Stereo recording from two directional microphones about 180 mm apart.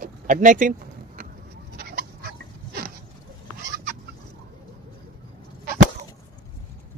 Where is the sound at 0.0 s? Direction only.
45° right (ahead or behind).